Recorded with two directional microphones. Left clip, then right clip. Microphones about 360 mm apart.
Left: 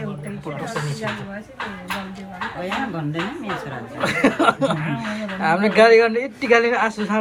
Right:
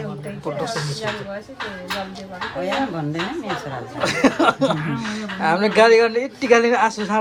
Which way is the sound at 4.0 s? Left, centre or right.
Centre.